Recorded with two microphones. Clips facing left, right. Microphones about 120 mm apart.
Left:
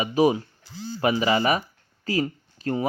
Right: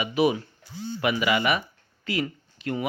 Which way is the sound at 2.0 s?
40° left (ahead or behind).